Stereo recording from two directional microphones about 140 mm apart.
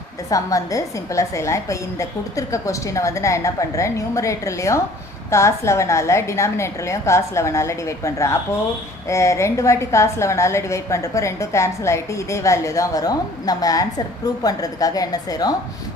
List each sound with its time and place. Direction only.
0.3 s a woman's voice: 25° left (ahead or behind)